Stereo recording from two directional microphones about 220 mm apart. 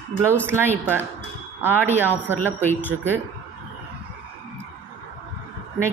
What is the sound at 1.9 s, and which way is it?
Speech, 10° right (ahead or behind).